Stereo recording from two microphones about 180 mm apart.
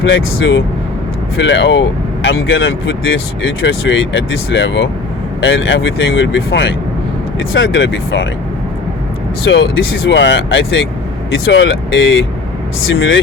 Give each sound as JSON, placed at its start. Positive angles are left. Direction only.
{"t": 0.0, "sound": "speech", "side_deg": 90}
{"t": 9.5, "sound": "speech", "side_deg": 90}